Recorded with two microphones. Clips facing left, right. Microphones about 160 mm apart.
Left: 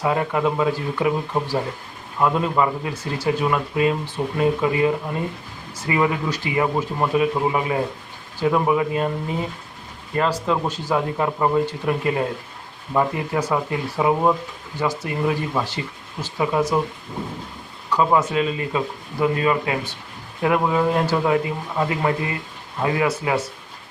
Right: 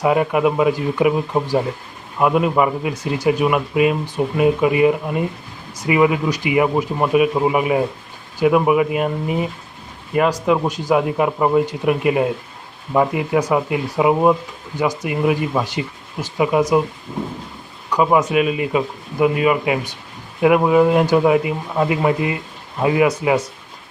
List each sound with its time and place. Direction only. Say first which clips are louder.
0.0 s speech: right 5 dB; 15° right (ahead or behind)
17.9 s speech: right 3 dB; 15° right (ahead or behind)